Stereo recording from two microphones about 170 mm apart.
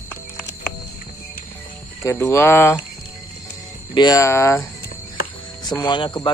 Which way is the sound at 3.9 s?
25° left (ahead or behind).